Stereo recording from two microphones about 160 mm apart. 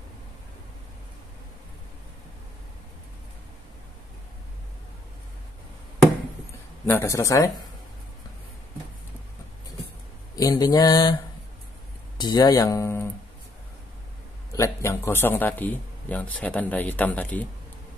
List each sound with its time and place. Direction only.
6.9 s speech: 15° left (ahead or behind)
10.3 s speech: 25° left (ahead or behind)
12.2 s speech: 25° left (ahead or behind)
14.5 s a man's voice: 20° left (ahead or behind)